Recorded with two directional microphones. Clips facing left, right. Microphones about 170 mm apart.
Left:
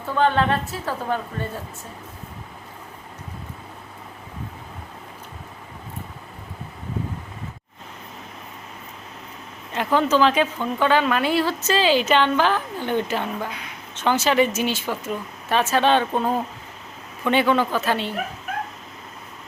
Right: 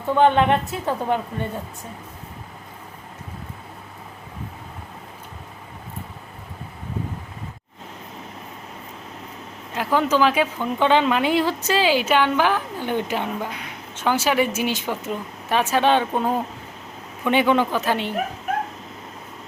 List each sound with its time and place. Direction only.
0.1 s a woman's voice: 20° right (ahead or behind)
9.7 s speech: 10° right (ahead or behind)